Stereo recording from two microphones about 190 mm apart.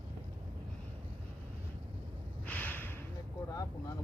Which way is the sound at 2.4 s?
10° left (ahead or behind).